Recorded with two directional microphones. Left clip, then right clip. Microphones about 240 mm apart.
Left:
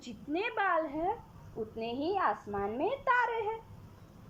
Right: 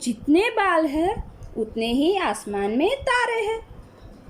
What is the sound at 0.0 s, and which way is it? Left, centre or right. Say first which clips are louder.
Speech: right 15 dB; centre.